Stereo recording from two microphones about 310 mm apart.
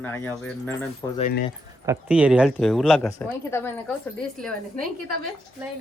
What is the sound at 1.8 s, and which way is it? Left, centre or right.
A woman's voice, centre.